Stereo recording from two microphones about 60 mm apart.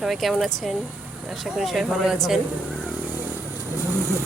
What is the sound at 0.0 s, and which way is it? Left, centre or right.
Speech, centre.